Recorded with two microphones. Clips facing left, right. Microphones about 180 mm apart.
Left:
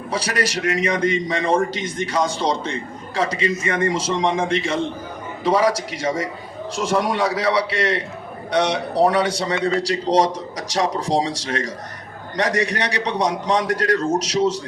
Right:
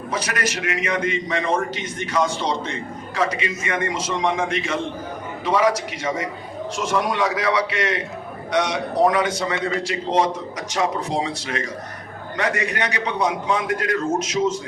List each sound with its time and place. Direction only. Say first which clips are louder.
0.1 s a man's voice: left 3 dB; 35° left (ahead or behind)